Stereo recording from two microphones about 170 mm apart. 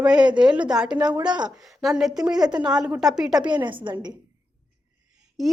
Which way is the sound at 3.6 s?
30° right (ahead or behind).